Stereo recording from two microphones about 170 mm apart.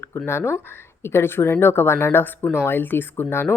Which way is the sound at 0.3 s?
15° left (ahead or behind).